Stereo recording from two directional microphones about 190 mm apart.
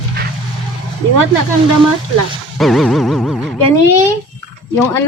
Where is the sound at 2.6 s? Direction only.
Centre (ahead or behind).